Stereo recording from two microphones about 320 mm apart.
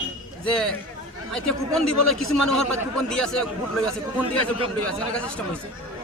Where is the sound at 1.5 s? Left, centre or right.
Left.